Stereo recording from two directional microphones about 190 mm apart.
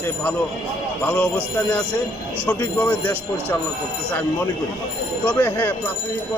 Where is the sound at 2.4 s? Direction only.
10° left (ahead or behind).